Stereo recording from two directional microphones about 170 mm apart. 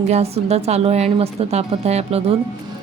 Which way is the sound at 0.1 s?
40° right (ahead or behind).